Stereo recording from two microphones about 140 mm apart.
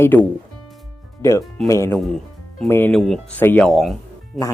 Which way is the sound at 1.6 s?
20° left (ahead or behind).